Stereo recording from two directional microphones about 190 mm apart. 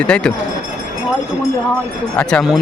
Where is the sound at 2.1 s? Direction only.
Centre (ahead or behind).